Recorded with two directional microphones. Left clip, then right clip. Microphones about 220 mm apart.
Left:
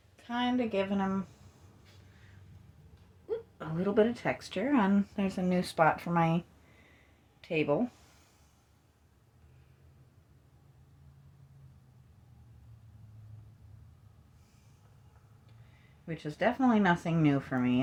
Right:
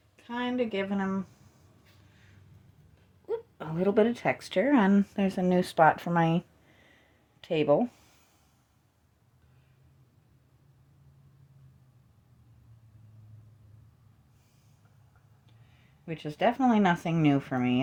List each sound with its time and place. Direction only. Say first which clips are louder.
0.2 s speech: right 1 dB; 25° right (ahead or behind)
3.2 s speech: right 3 dB; 40° right (ahead or behind)
7.4 s speech: right 5 dB; 35° right (ahead or behind)
16.0 s speech: right 3 dB; 35° right (ahead or behind)